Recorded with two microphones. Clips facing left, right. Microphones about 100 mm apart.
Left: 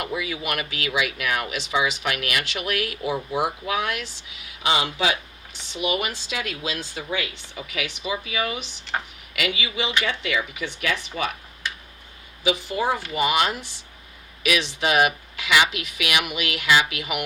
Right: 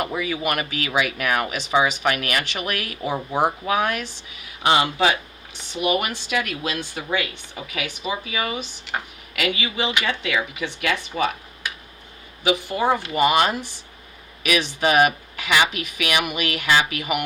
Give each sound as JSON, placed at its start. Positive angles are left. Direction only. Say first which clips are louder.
{"t": 0.0, "sound": "speech", "louder": "right 4 dB", "side_deg": -45}
{"t": 12.4, "sound": "speech", "louder": "right 2 dB", "side_deg": -55}